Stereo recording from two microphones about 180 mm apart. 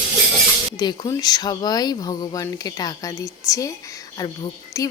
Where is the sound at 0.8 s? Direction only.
20° left (ahead or behind).